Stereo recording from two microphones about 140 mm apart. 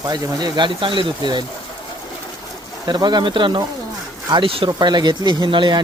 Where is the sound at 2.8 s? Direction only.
30° right (ahead or behind).